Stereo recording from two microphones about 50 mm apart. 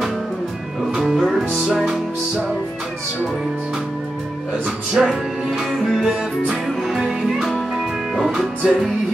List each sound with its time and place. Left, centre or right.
0.9 s music: centre
5.0 s music: centre